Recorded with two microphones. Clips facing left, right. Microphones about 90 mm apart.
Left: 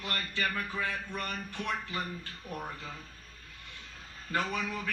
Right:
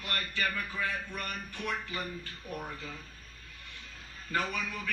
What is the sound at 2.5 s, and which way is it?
Speech, 25° left (ahead or behind).